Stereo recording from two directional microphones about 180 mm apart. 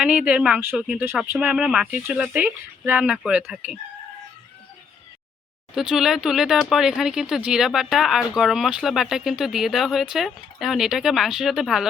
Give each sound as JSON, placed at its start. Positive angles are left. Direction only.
{"t": 0.0, "sound": "speech", "side_deg": -5}
{"t": 5.7, "sound": "speech", "side_deg": -5}